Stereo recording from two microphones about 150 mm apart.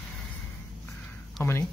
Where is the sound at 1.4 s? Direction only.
15° left (ahead or behind).